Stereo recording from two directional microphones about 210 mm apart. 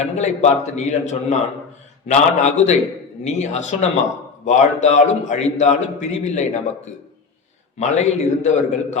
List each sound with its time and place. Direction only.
0.0 s a man's voice: 35° left (ahead or behind)
7.8 s a man's voice: 35° left (ahead or behind)